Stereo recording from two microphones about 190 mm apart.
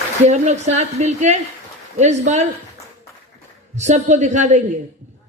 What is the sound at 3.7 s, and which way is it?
Speech, 40° right (ahead or behind).